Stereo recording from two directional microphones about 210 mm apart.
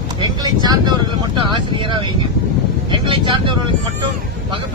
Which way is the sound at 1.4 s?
25° right (ahead or behind).